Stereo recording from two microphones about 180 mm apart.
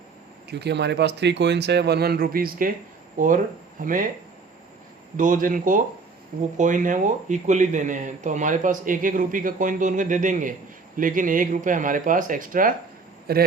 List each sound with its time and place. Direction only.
0.5 s speech: 70° right (ahead or behind); by 4.1 s 50° right (ahead or behind)
5.1 s a man's voice: 50° right (ahead or behind)